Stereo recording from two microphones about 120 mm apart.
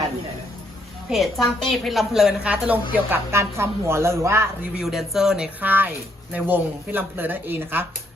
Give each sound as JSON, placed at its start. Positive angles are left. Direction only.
{"t": 1.1, "sound": "a woman's voice", "side_deg": 0}
{"t": 4.8, "sound": "a woman's voice", "side_deg": 0}
{"t": 5.5, "sound": "speech", "side_deg": -15}